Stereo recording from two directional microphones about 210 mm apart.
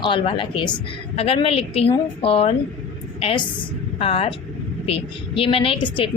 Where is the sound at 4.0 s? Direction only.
25° left (ahead or behind).